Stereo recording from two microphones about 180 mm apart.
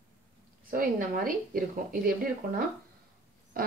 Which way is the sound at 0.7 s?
50° right (ahead or behind).